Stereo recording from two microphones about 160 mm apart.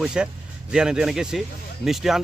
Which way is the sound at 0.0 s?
5° right (ahead or behind).